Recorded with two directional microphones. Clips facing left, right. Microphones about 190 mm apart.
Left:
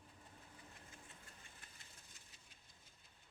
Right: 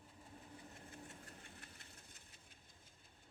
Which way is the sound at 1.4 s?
65° right (ahead or behind).